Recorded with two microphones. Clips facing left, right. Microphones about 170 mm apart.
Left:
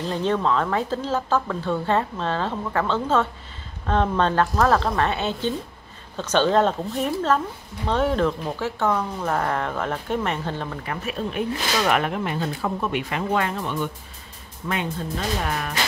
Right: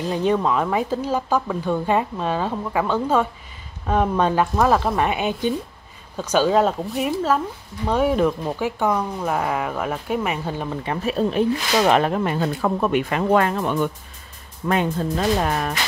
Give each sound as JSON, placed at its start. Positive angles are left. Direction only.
{"t": 0.1, "sound": "speech", "side_deg": -10}
{"t": 10.9, "sound": "speech", "side_deg": -35}
{"t": 12.4, "sound": "speech", "side_deg": -55}